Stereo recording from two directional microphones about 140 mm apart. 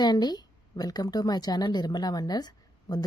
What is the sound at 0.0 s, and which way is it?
A woman's voice, 30° left (ahead or behind).